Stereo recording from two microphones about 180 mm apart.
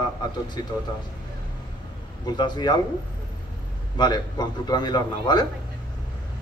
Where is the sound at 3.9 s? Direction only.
20° left (ahead or behind).